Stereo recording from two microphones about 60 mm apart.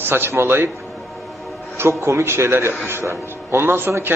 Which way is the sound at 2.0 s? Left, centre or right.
Right.